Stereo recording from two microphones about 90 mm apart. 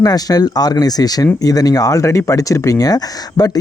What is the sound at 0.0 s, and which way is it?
Speech, 45° left (ahead or behind).